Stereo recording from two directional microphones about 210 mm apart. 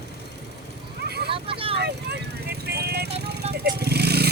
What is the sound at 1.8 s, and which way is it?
Vehicle, 50° right (ahead or behind).